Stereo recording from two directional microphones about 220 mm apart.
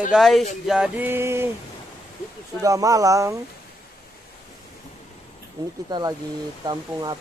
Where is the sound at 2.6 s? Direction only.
15° right (ahead or behind).